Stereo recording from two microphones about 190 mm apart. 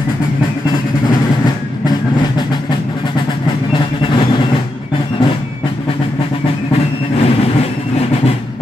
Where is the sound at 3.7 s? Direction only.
25° left (ahead or behind).